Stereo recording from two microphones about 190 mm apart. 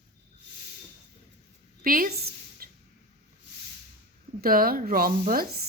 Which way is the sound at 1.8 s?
45° right (ahead or behind).